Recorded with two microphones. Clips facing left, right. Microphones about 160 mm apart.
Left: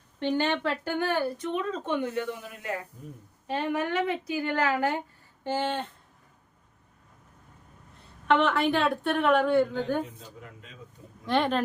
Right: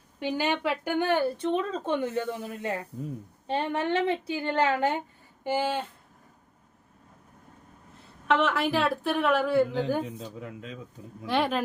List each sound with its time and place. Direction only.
0.2 s speech: 10° right (ahead or behind); by 4.9 s 25° right (ahead or behind)
5.4 s a sound: 10° right (ahead or behind)
8.3 s a woman's voice: centre (ahead or behind)
11.3 s a woman's voice: 5° right (ahead or behind)